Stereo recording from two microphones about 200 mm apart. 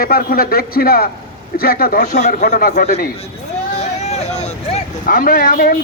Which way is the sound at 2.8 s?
35° left (ahead or behind).